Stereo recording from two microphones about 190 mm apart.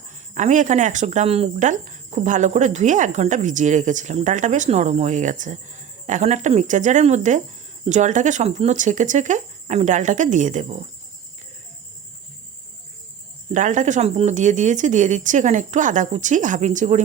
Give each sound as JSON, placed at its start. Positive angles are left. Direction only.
{"t": 0.3, "sound": "speech", "side_deg": -40}
{"t": 13.5, "sound": "speech", "side_deg": -40}